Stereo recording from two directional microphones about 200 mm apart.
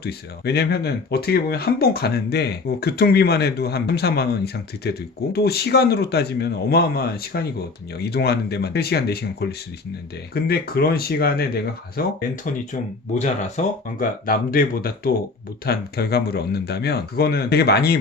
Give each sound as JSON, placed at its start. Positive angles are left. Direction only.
{"t": 0.0, "sound": "speech", "side_deg": 55}
{"t": 13.1, "sound": "speech", "side_deg": 40}